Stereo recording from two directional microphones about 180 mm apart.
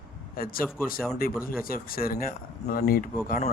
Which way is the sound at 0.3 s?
55° left (ahead or behind).